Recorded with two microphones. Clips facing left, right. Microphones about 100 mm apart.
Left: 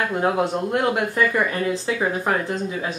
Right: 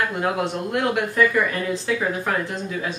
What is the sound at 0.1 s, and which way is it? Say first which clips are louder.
Speech: left 3 dB; 25° left (ahead or behind).